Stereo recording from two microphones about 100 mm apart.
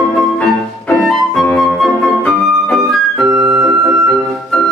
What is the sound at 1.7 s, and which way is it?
Flute, centre (ahead or behind).